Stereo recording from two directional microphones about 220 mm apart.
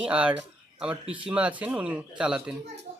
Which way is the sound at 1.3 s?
5° right (ahead or behind).